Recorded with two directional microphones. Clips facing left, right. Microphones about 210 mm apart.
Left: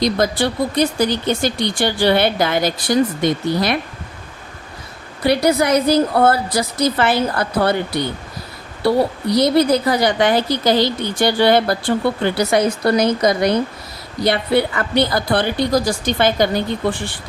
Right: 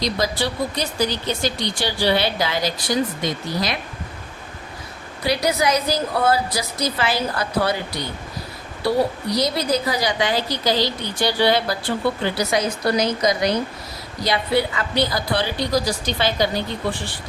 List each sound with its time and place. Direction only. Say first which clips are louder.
0.0 s speech: left 5 dB; 55° left (ahead or behind)
5.2 s a woman's voice: left 5 dB; 55° left (ahead or behind)
9.3 s a woman's voice: left 10 dB; 60° left (ahead or behind)